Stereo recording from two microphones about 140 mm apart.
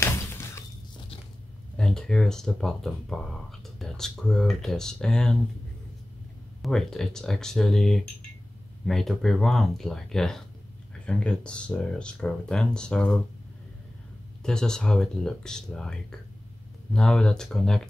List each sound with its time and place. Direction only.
0.0 s a sound: 15° left (ahead or behind)
1.8 s speech: 5° left (ahead or behind)
6.6 s speech: 5° left (ahead or behind)
14.4 s speech: 5° left (ahead or behind)